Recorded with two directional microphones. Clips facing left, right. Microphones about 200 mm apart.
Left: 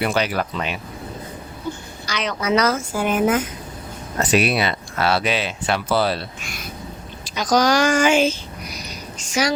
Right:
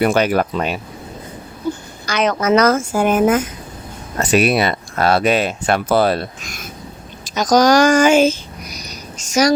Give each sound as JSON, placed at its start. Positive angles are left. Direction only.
{"t": 0.0, "sound": "speech", "side_deg": -50}
{"t": 2.0, "sound": "speech", "side_deg": -50}